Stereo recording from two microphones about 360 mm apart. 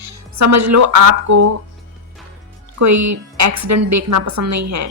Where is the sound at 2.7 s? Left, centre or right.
Right.